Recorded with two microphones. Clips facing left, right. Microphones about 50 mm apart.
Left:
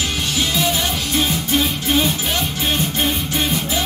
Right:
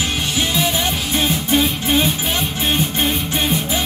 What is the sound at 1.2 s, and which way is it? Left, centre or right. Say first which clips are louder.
Music: right 2 dB; centre.